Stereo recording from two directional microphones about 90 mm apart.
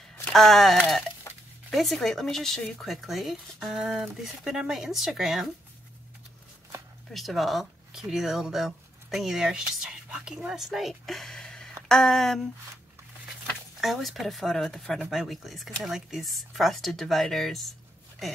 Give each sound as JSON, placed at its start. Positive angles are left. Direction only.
{"t": 0.3, "sound": "speech", "side_deg": 5}
{"t": 1.3, "sound": "a sound", "side_deg": 35}
{"t": 1.7, "sound": "speech", "side_deg": 0}
{"t": 7.1, "sound": "speech", "side_deg": 0}
{"t": 13.7, "sound": "speech", "side_deg": 0}